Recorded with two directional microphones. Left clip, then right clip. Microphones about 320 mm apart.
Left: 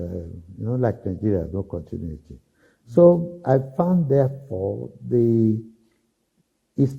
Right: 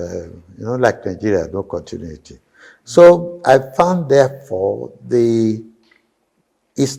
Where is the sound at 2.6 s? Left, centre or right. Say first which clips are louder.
Right 7 dB; centre.